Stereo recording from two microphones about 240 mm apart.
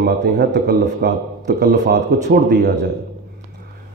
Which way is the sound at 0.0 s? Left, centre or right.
Right.